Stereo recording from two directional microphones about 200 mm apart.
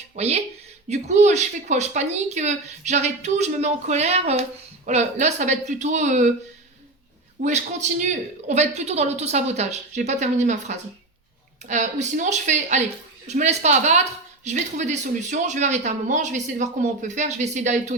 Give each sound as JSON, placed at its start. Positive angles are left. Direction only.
{"t": 0.2, "sound": "a woman's voice", "side_deg": -30}
{"t": 7.4, "sound": "a woman's voice", "side_deg": -35}